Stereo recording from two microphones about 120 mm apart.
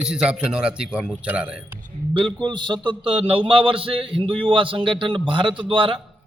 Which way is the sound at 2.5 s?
40° right (ahead or behind).